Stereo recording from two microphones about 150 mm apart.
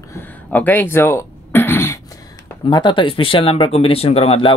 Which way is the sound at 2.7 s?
30° left (ahead or behind).